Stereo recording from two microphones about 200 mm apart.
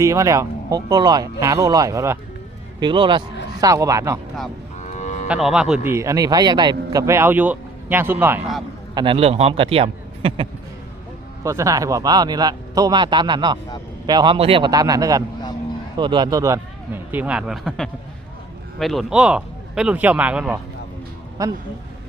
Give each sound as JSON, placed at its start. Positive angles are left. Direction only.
{"t": 0.0, "sound": "a man's voice", "side_deg": -15}
{"t": 4.9, "sound": "moo", "side_deg": 35}
{"t": 5.3, "sound": "a man's voice", "side_deg": -5}
{"t": 9.0, "sound": "speech", "side_deg": -25}
{"t": 11.4, "sound": "a man's voice", "side_deg": -15}
{"t": 21.4, "sound": "a man's voice", "side_deg": -20}